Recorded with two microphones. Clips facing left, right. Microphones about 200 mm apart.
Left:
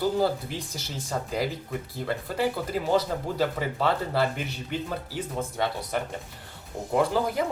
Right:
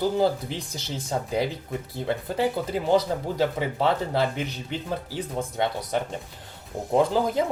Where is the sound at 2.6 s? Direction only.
25° right (ahead or behind).